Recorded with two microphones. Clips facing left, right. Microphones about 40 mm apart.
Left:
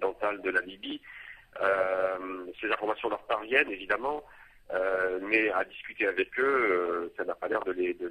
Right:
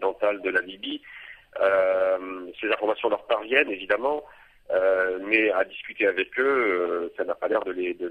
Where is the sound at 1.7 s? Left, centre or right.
Centre.